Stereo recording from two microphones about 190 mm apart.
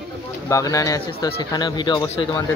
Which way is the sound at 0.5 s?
15° left (ahead or behind).